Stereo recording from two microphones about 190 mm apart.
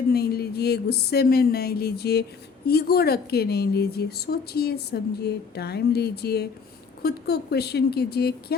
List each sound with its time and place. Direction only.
0.1 s speech: 55° left (ahead or behind)